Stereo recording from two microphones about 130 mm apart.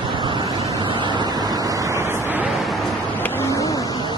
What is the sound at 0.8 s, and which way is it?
Vehicle, 40° right (ahead or behind).